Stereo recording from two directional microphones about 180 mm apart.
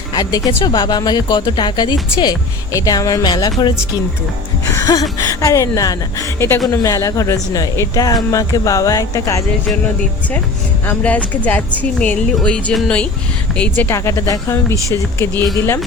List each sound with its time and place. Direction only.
0.1 s speech: 20° left (ahead or behind)
10.8 s speech: 10° left (ahead or behind)